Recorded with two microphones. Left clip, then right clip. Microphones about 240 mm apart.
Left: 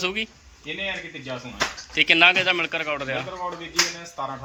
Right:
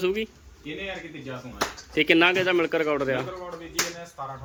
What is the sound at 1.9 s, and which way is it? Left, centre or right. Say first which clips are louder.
Speech: left 3 dB; centre.